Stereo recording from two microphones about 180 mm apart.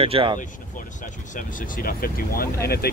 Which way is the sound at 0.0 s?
30° right (ahead or behind).